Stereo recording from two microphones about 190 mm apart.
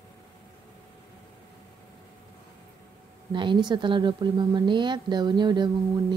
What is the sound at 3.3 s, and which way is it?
Speech, 25° right (ahead or behind).